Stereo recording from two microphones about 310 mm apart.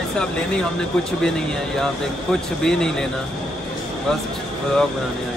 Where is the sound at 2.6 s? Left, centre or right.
Centre.